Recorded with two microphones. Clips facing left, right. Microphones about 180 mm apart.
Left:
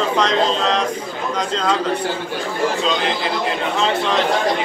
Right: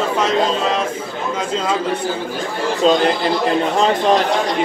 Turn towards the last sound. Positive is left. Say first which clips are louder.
# right 4 dB
turn(degrees=-40)  # may be behind; listen again after turning